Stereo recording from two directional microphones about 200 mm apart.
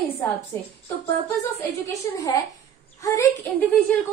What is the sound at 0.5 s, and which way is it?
Speech, 10° left (ahead or behind).